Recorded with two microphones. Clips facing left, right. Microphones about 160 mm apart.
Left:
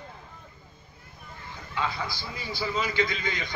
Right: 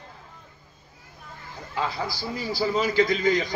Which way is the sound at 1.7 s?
40° right (ahead or behind).